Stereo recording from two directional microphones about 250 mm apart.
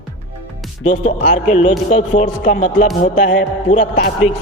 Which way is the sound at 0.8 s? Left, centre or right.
Left.